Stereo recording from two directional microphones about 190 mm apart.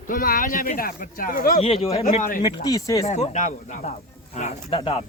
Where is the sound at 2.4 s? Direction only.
20° left (ahead or behind).